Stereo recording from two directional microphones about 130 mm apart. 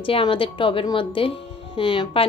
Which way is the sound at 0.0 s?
40° left (ahead or behind).